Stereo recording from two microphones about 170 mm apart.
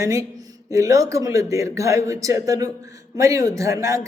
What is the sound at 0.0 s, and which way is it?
Speech, 20° right (ahead or behind).